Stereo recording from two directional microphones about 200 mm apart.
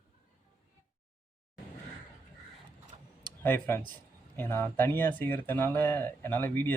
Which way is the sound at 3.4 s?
10° left (ahead or behind).